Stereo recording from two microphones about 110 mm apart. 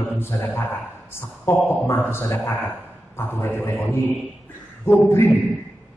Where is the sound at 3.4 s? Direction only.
20° left (ahead or behind).